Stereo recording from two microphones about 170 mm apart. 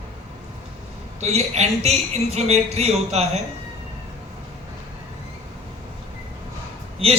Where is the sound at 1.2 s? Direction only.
40° right (ahead or behind).